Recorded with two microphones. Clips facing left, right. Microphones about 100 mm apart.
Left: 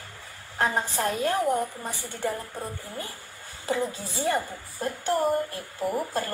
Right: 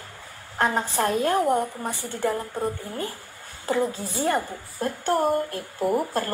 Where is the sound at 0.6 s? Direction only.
50° right (ahead or behind).